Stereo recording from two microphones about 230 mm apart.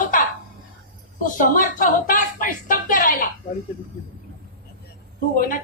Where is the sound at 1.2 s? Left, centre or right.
Left.